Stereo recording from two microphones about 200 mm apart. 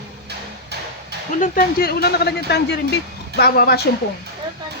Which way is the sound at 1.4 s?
50° left (ahead or behind).